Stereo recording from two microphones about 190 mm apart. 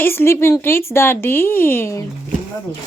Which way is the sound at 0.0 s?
10° left (ahead or behind).